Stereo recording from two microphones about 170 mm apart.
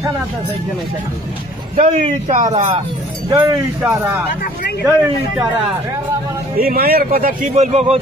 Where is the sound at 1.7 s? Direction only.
40° right (ahead or behind).